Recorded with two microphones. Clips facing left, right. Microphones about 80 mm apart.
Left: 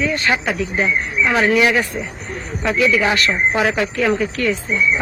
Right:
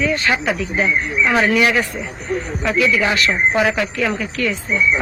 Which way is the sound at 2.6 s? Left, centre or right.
Centre.